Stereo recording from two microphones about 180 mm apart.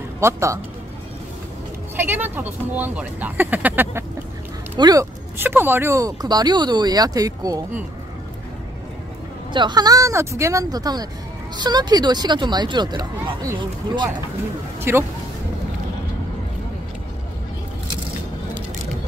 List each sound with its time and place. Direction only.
0.2 s speech: 15° right (ahead or behind)
2.0 s speech: 10° right (ahead or behind)
4.7 s speech: 20° right (ahead or behind)
5.4 s speech: 10° right (ahead or behind)
9.5 s speech: 25° right (ahead or behind)